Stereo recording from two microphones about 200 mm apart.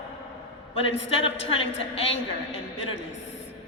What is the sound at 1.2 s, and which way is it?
Speech, 30° left (ahead or behind).